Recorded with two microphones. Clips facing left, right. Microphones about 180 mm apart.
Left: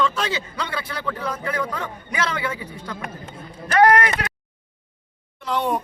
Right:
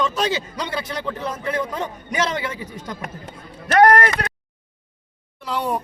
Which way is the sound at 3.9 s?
45° right (ahead or behind).